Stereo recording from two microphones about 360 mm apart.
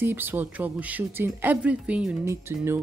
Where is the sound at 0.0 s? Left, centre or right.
Centre.